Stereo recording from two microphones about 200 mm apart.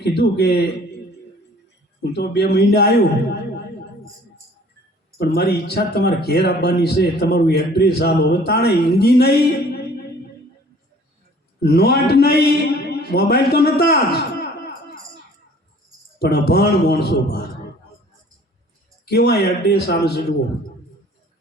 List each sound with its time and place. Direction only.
0.0 s speech: 55° left (ahead or behind)
2.0 s speech: 55° left (ahead or behind)
5.1 s speech: 55° left (ahead or behind)
11.6 s a man's voice: 55° left (ahead or behind)
16.1 s speech: 55° left (ahead or behind)
19.0 s speech: 55° left (ahead or behind)